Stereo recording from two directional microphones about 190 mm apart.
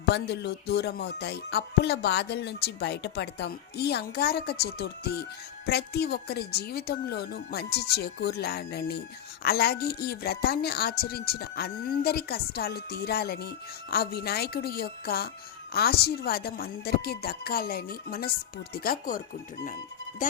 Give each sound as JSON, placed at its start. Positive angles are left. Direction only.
{"t": 0.0, "sound": "a woman's voice", "side_deg": 65}